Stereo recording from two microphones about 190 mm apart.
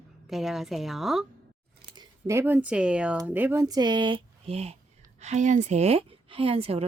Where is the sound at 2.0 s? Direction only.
15° right (ahead or behind).